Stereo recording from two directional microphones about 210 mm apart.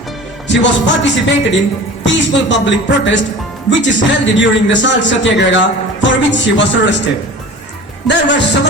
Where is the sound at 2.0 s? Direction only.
60° left (ahead or behind).